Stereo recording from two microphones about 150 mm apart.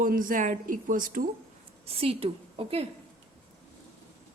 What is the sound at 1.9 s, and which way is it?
A woman's voice, 40° right (ahead or behind).